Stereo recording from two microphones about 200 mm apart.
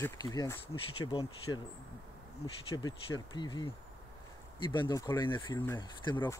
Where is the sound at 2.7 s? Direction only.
20° left (ahead or behind).